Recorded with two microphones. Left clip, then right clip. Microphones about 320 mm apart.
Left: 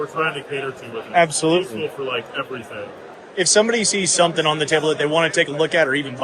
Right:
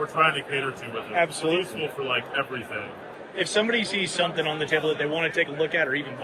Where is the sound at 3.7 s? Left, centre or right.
Left.